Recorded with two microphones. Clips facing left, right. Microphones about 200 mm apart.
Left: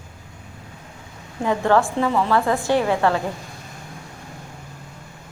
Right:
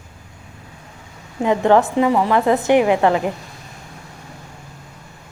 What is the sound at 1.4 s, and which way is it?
A woman's voice, 20° right (ahead or behind).